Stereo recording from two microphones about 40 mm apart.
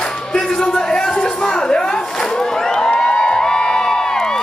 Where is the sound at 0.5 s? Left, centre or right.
Centre.